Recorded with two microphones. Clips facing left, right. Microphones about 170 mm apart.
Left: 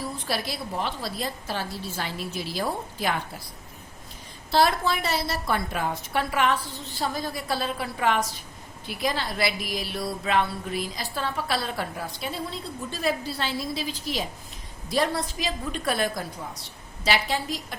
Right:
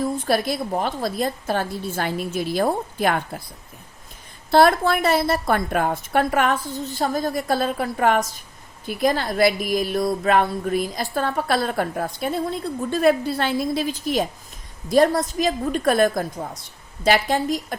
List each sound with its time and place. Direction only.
0.0 s speech: 50° right (ahead or behind)
4.5 s speech: 55° right (ahead or behind)